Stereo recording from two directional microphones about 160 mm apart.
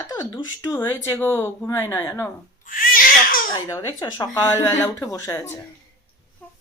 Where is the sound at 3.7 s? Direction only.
15° left (ahead or behind).